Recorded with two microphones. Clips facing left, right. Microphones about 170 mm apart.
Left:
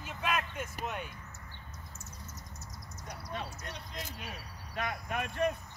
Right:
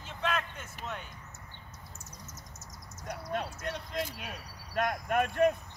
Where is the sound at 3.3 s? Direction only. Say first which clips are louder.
Right 6 dB; 60° right (ahead or behind).